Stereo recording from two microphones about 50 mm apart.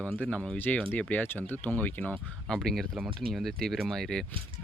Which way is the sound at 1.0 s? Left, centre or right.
Left.